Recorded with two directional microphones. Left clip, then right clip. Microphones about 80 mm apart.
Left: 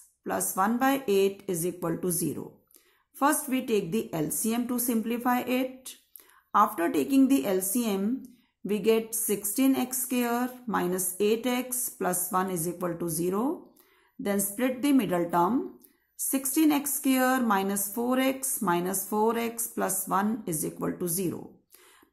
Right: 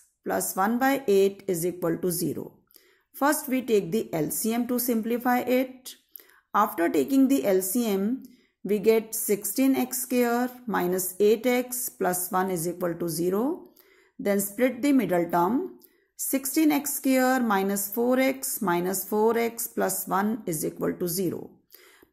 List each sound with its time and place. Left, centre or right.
0.2 s a woman's voice: right